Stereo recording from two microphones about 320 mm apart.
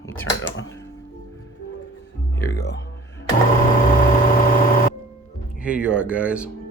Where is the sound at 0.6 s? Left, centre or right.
Centre.